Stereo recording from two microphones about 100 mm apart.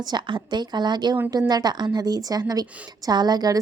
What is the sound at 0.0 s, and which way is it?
A woman's voice, 50° right (ahead or behind).